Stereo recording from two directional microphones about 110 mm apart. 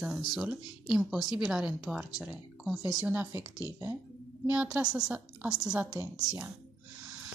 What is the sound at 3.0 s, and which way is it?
Speech, 20° right (ahead or behind).